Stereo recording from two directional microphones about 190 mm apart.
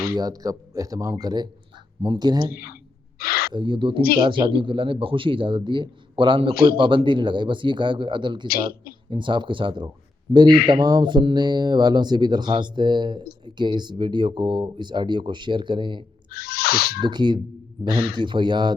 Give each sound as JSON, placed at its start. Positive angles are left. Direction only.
{"t": 0.1, "sound": "speech", "side_deg": -20}
{"t": 2.5, "sound": "a man's voice", "side_deg": 55}
{"t": 3.5, "sound": "speech", "side_deg": -25}
{"t": 8.4, "sound": "a man's voice", "side_deg": 50}
{"t": 9.0, "sound": "speech", "side_deg": -25}
{"t": 16.3, "sound": "owl", "side_deg": 55}
{"t": 17.0, "sound": "speech", "side_deg": -25}